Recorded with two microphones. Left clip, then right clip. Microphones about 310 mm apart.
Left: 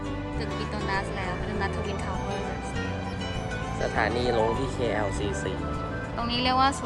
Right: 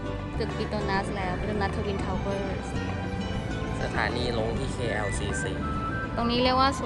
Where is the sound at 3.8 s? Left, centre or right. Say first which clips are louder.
Left 3 dB; left.